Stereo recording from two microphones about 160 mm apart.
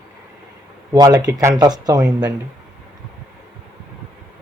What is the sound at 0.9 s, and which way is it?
Speech, 20° right (ahead or behind).